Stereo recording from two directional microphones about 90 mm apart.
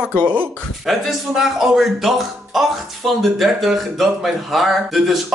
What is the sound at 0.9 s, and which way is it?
Speech, 5° right (ahead or behind).